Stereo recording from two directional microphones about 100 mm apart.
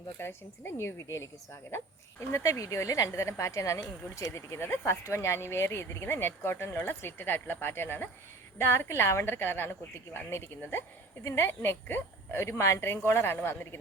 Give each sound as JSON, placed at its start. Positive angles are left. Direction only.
{"t": 0.2, "sound": "speech", "side_deg": 25}
{"t": 2.3, "sound": "speech", "side_deg": 35}